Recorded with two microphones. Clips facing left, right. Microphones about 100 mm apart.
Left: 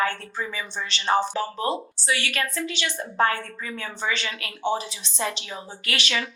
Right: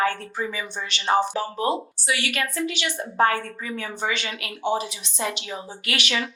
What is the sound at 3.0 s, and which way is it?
Speech, 30° right (ahead or behind).